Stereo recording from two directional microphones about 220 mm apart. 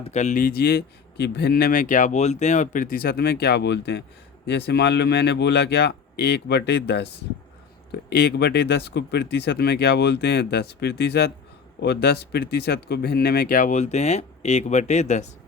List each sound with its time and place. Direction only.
0.0 s speech: 30° left (ahead or behind); by 7.1 s 50° left (ahead or behind)
8.1 s speech: 50° left (ahead or behind); by 15.3 s 30° left (ahead or behind)